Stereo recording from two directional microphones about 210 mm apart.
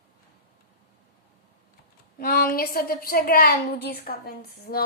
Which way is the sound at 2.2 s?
45° left (ahead or behind).